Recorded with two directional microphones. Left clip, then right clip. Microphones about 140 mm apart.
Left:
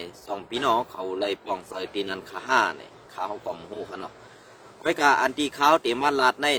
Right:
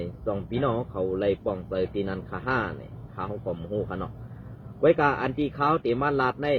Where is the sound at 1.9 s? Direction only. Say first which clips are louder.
Left 1 dB; 30° left (ahead or behind).